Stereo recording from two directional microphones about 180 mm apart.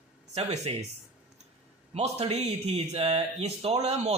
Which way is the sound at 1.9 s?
35° right (ahead or behind).